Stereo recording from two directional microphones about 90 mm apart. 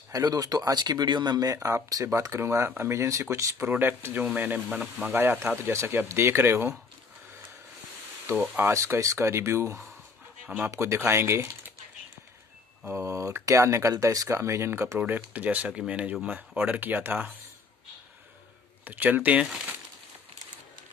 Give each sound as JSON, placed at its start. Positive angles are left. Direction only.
{"t": 0.1, "sound": "speech", "side_deg": -45}
{"t": 8.5, "sound": "speech", "side_deg": -30}
{"t": 12.8, "sound": "speech", "side_deg": -30}
{"t": 15.0, "sound": "speech", "side_deg": -20}
{"t": 18.9, "sound": "speech", "side_deg": -20}